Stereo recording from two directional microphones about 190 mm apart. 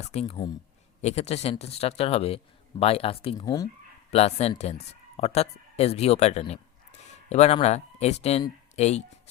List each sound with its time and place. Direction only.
0.0 s speech: 35° left (ahead or behind)
3.4 s speech: 20° left (ahead or behind)
4.1 s speech: 35° left (ahead or behind)